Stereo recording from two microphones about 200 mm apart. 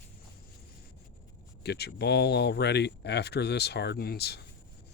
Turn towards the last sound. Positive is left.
turn(degrees=55)  # may be behind; listen again after turning